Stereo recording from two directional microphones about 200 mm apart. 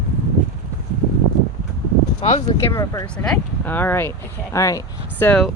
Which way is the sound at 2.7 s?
15° left (ahead or behind).